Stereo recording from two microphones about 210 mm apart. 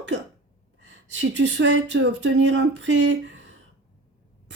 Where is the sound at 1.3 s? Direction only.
60° right (ahead or behind).